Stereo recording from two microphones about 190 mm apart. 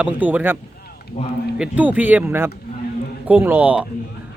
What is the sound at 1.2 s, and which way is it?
Speech, 35° left (ahead or behind).